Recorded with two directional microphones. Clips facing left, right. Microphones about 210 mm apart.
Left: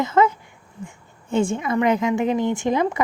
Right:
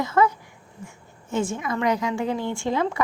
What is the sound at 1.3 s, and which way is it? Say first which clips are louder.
Speech: left 5 dB; 30° left (ahead or behind).